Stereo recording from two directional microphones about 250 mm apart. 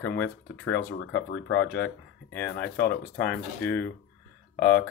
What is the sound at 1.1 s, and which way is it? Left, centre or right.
Speech, left.